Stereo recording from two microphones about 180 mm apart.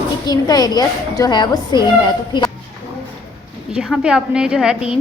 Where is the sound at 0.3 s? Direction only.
20° left (ahead or behind).